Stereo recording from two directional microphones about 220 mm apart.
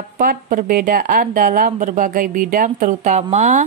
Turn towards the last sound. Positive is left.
turn(degrees=-30)  # may be behind; listen again after turning